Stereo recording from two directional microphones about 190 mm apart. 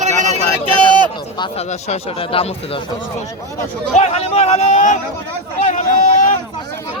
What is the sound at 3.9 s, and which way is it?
Speech, 35° left (ahead or behind).